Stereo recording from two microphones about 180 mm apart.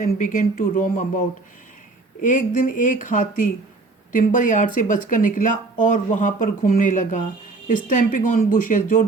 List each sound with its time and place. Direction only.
0.0 s speech: 45° left (ahead or behind)
2.2 s speech: 45° left (ahead or behind)